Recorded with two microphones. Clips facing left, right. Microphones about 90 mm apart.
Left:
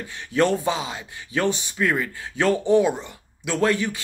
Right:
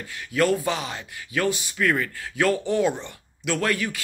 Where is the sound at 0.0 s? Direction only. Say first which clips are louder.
Left 2 dB; 25° left (ahead or behind).